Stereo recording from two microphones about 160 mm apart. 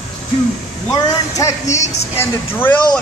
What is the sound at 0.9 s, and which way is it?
Speech, 20° left (ahead or behind).